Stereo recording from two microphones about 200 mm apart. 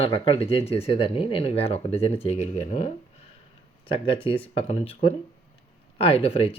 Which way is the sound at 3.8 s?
25° left (ahead or behind).